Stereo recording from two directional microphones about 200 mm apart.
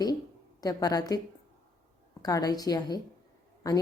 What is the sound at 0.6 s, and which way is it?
Speech, 20° left (ahead or behind).